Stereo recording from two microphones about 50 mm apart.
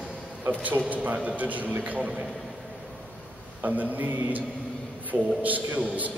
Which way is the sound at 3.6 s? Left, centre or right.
Right.